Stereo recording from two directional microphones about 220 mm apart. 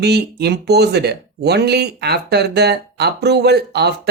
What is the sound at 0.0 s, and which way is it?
Speech, 50° right (ahead or behind).